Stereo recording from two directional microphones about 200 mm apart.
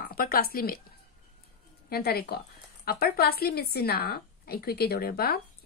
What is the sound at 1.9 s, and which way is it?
Speech, 50° left (ahead or behind).